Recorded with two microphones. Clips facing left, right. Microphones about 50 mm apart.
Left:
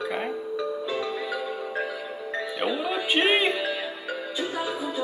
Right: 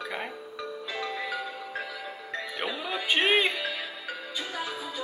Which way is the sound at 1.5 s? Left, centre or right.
Centre.